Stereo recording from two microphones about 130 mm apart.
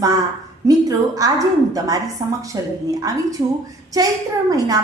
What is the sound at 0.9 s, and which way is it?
Speech, 25° right (ahead or behind).